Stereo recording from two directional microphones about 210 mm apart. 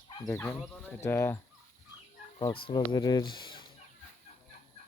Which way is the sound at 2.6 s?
20° left (ahead or behind).